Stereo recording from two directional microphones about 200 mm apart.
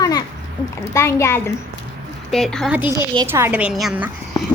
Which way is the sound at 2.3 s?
Centre (ahead or behind).